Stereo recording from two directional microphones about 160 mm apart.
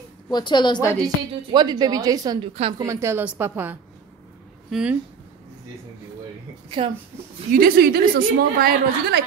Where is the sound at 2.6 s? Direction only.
35° right (ahead or behind).